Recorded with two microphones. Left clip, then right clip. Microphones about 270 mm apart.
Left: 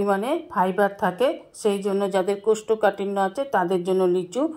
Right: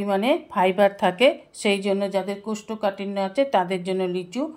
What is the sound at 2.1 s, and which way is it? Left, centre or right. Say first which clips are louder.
Speech: left 5 dB; left.